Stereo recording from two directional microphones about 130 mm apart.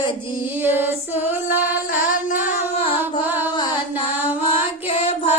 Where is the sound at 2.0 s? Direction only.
90° left.